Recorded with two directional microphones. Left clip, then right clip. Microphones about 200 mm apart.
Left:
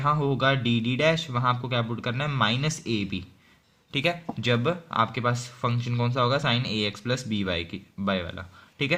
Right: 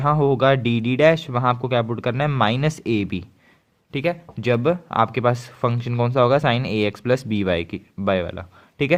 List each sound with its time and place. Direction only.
0.0 s speech: 45° right (ahead or behind)